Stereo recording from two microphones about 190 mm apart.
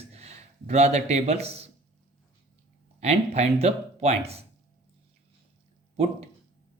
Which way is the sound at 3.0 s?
35° right (ahead or behind).